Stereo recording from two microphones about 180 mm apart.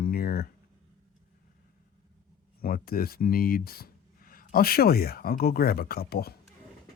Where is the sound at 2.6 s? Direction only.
55° left (ahead or behind).